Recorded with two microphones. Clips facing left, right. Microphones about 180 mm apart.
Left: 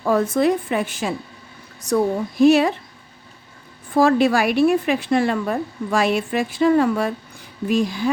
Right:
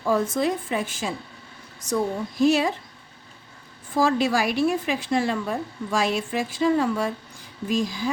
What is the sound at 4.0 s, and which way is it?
A woman's voice, 60° left (ahead or behind).